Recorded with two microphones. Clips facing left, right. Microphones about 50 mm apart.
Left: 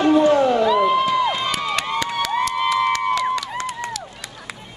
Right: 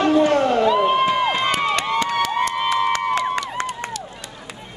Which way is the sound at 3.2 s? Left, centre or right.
Right.